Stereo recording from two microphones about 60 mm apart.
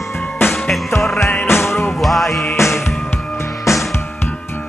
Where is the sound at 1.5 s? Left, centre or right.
Left.